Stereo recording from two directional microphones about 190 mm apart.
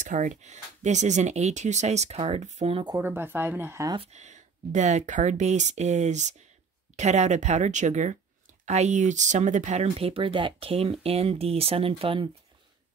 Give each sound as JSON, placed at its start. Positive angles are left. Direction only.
{"t": 0.0, "sound": "speech", "side_deg": -40}
{"t": 3.0, "sound": "speech", "side_deg": -10}
{"t": 4.0, "sound": "speech", "side_deg": -35}